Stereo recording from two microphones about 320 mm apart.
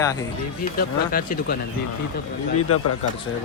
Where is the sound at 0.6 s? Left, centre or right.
Left.